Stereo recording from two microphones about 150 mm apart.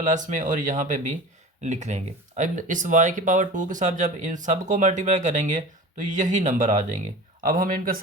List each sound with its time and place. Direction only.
0.0 s speech: 55° right (ahead or behind)
7.4 s speech: 70° right (ahead or behind)